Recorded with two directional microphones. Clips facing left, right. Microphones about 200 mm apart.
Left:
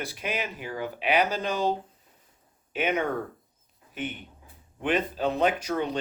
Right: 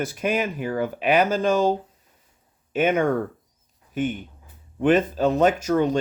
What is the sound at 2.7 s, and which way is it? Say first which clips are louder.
Speech: right 7 dB; 45° right (ahead or behind).